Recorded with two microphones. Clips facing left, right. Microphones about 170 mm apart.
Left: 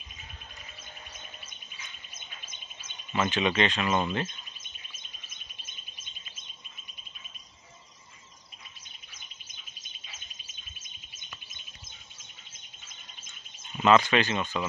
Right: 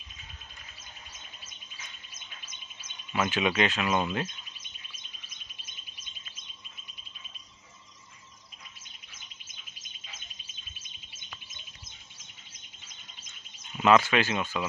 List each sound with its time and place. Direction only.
2.1 s bird: 55° left (ahead or behind)
3.1 s speech: 10° right (ahead or behind)
13.7 s speech: 5° right (ahead or behind)